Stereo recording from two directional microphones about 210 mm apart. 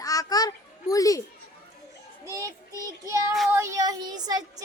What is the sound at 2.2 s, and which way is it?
Child singing, 15° right (ahead or behind).